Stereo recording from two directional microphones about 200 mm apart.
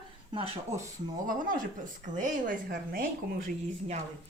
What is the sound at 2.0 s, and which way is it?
Speech, 40° right (ahead or behind).